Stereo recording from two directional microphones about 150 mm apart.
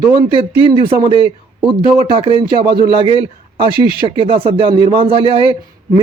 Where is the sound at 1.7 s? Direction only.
35° right (ahead or behind).